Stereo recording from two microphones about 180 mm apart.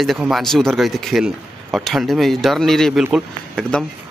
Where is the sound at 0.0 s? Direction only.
Centre (ahead or behind).